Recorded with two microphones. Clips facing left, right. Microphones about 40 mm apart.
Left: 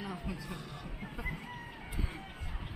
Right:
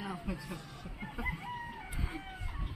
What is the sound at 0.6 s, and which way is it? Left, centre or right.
Speech, centre.